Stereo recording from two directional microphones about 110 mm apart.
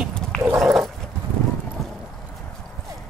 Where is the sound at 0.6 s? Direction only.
5° right (ahead or behind).